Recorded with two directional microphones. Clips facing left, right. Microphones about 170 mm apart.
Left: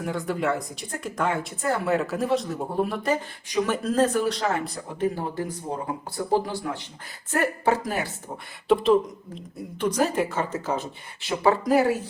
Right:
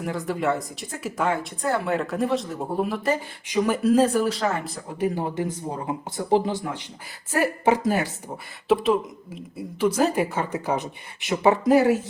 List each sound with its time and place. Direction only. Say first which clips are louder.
0.0 s speech: right 1 dB; centre (ahead or behind)
3.4 s speech: right 6 dB; 15° right (ahead or behind)
5.1 s speech: right 3 dB; 20° right (ahead or behind)
8.7 s speech: left 1 dB; 5° right (ahead or behind); by 11.7 s 20° right (ahead or behind)